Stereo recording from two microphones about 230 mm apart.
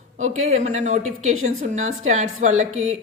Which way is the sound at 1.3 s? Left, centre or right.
Right.